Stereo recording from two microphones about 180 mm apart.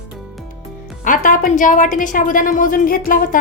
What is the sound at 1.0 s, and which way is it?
A woman's voice, 45° left (ahead or behind).